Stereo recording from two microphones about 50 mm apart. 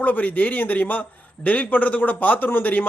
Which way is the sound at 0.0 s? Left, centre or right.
Left.